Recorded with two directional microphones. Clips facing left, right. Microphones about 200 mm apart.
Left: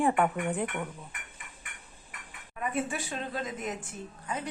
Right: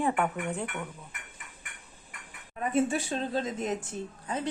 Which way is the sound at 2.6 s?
30° right (ahead or behind).